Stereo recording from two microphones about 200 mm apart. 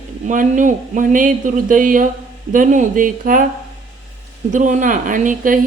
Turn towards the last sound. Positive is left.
turn(degrees=-40)  # may be behind; listen again after turning